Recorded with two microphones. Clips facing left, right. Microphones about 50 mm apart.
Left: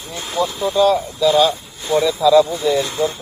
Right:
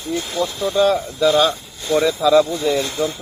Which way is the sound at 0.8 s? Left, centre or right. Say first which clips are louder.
Left 1 dB; right.